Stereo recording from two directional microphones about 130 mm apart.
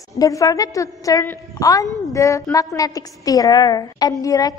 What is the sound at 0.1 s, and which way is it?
A woman's voice, 25° left (ahead or behind).